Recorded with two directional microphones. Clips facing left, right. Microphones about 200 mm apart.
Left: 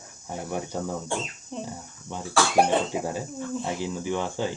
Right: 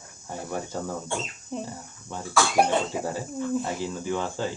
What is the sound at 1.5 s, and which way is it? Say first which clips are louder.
Speech: right 2 dB; 5° right (ahead or behind).